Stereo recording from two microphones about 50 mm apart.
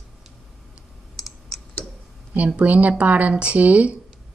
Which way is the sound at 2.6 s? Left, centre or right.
Right.